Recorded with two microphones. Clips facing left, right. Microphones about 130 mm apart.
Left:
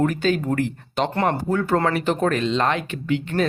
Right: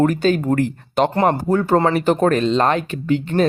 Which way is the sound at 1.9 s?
40° right (ahead or behind).